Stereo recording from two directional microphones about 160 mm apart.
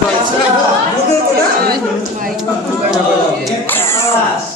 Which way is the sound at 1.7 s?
60° right (ahead or behind).